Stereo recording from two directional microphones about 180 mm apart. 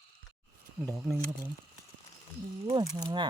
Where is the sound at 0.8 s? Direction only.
Centre (ahead or behind).